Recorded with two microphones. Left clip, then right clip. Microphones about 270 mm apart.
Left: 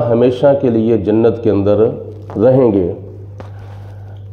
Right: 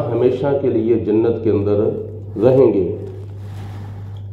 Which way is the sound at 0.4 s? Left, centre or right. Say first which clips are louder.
Left 6 dB; left.